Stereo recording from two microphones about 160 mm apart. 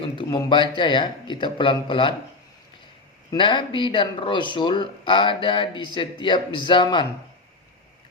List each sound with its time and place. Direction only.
0.2 s speech: 30° left (ahead or behind)
3.3 s speech: 30° left (ahead or behind)